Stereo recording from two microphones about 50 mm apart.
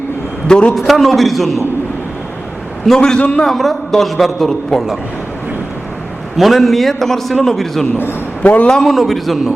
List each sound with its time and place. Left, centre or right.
0.4 s a man's voice: centre
0.8 s a man's voice: centre
2.9 s a man's voice: centre
3.2 s a man's voice: left
3.4 s a man's voice: centre
6.3 s a man's voice: centre
8.4 s a man's voice: left
8.6 s a man's voice: centre
8.9 s a man's voice: centre